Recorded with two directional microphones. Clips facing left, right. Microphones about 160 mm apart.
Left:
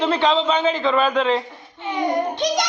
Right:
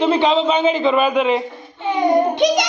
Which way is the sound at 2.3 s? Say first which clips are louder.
Right 6 dB; 15° right (ahead or behind).